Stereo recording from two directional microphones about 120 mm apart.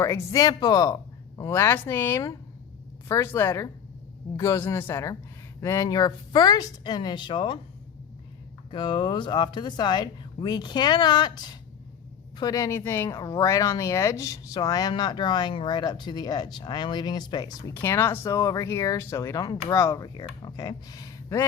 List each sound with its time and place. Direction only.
0.0 s speech: 25° left (ahead or behind); by 7.6 s 40° left (ahead or behind)
8.7 s speech: 40° left (ahead or behind)
17.7 s speech: 20° left (ahead or behind)